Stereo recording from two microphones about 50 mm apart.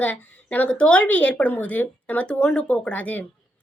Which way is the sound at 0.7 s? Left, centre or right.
Left.